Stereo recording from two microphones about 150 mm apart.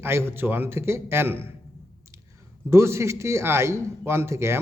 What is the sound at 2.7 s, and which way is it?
A man's voice, 20° right (ahead or behind).